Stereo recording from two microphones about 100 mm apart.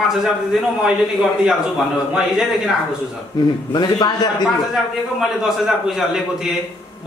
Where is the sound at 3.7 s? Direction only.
45° left (ahead or behind).